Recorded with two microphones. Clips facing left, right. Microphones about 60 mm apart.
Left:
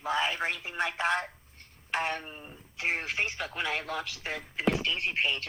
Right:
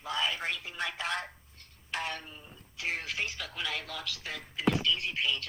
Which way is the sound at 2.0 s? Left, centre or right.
Left.